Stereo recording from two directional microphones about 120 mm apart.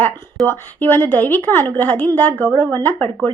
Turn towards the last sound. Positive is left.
turn(degrees=15)  # may be behind; listen again after turning